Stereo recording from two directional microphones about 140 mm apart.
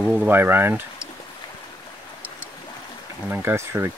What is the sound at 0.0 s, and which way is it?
Speech, 10° right (ahead or behind).